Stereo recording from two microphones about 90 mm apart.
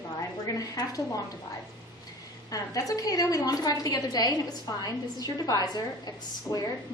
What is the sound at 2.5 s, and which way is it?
A woman's voice, 40° left (ahead or behind).